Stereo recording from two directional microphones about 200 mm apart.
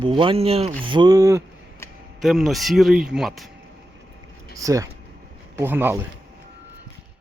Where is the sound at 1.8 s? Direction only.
15° left (ahead or behind).